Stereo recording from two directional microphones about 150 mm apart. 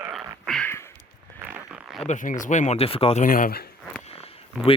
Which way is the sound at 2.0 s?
60° left (ahead or behind).